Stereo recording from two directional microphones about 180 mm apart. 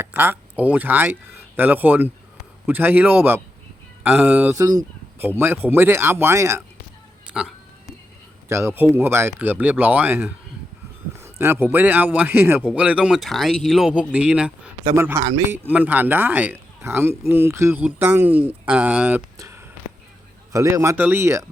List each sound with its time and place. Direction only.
0.0 s speech: 10° right (ahead or behind)
4.6 s speech: 20° right (ahead or behind)
7.3 s music: 5° right (ahead or behind)
8.4 s speech: 15° right (ahead or behind)